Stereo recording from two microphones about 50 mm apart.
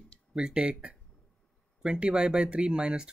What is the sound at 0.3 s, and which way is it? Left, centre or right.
Speech, centre.